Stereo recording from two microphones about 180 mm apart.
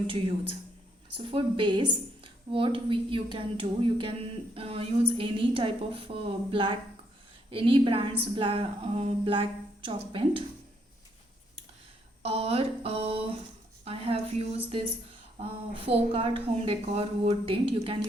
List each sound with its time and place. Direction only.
0.1 s a woman's voice: 30° right (ahead or behind)
12.2 s speech: 35° right (ahead or behind)